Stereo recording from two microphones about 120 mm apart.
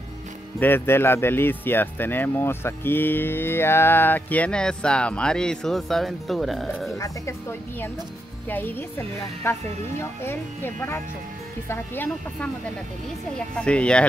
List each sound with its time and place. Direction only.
0.6 s speech: 15° left (ahead or behind); by 7.0 s centre (ahead or behind)
7.0 s a woman's voice: 25° left (ahead or behind)
13.6 s speech: 10° left (ahead or behind)